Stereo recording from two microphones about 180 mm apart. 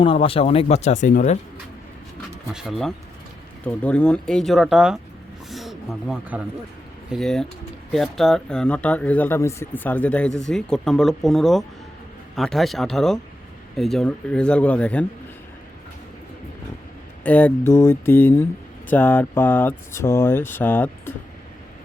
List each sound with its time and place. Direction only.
0.0 s speech: 30° left (ahead or behind)
2.5 s speech: centre (ahead or behind)
5.5 s a sound: centre (ahead or behind)
7.1 s speech: centre (ahead or behind)
17.2 s speech: 10° left (ahead or behind)